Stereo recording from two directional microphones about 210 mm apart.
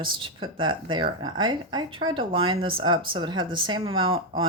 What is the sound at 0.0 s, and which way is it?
Speech, 25° right (ahead or behind).